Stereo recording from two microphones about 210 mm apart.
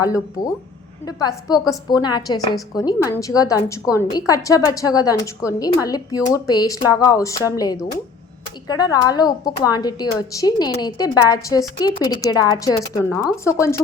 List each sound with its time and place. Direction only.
0.0 s a woman's voice: 15° left (ahead or behind)